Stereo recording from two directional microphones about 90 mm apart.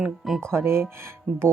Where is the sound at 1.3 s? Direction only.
15° right (ahead or behind).